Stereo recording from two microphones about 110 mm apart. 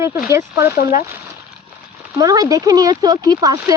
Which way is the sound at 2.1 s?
35° right (ahead or behind).